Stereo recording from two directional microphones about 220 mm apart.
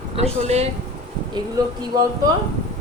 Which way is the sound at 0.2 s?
30° right (ahead or behind).